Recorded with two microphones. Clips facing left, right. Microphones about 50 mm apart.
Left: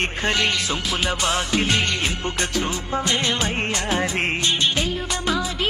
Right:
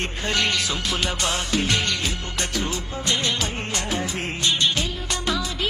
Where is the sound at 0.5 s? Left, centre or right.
Left.